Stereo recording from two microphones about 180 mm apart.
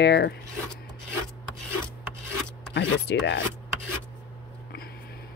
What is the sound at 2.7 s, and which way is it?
Speech, 75° left (ahead or behind).